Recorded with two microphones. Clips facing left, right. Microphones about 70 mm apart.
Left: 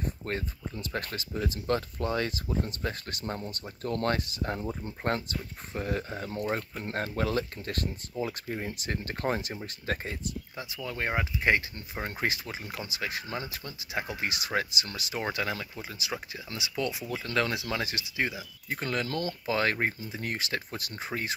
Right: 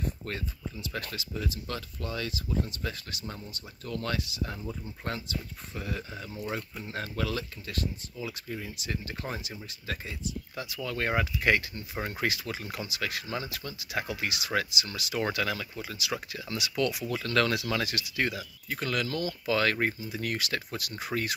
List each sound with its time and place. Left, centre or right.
0.2 s speech: left
10.5 s speech: left
18.7 s speech: left